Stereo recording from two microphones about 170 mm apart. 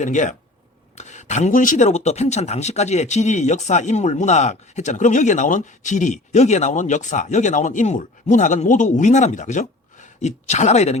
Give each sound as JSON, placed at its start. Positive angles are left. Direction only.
{"t": 0.0, "sound": "speech", "side_deg": 45}